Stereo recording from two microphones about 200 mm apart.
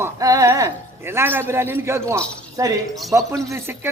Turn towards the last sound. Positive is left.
turn(degrees=-10)  # may be behind; listen again after turning